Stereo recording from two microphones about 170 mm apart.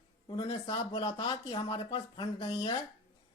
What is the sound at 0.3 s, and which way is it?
A man's voice, 30° left (ahead or behind).